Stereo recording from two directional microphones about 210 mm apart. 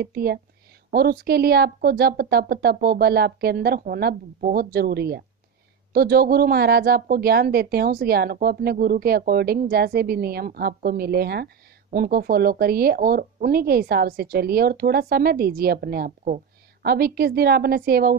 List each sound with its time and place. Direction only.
0.0 s speech: 50° right (ahead or behind)